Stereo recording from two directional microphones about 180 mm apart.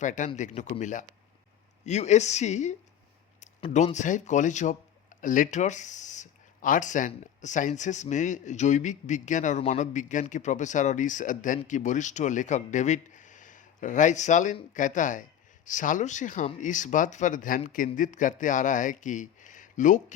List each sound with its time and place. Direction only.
0.0 s speech: 45° left (ahead or behind)